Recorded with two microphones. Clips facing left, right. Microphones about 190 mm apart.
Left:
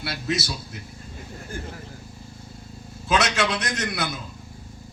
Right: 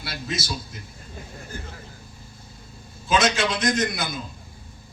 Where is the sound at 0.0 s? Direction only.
65° left (ahead or behind).